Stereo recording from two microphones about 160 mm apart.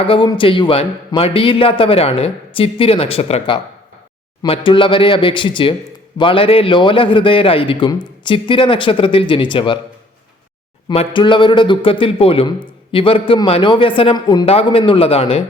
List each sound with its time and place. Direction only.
0.1 s a man's voice: 30° left (ahead or behind)
10.8 s a man's voice: 35° left (ahead or behind)